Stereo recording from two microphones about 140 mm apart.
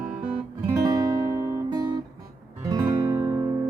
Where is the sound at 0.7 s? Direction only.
25° right (ahead or behind).